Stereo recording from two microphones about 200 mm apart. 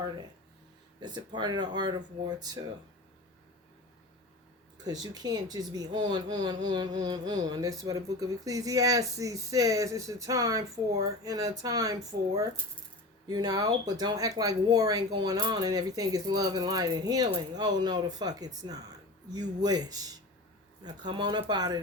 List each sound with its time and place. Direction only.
0.9 s speech: 20° right (ahead or behind)
4.9 s speech: 20° right (ahead or behind)